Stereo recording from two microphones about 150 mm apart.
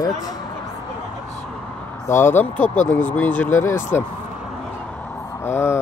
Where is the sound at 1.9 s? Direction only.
15° left (ahead or behind).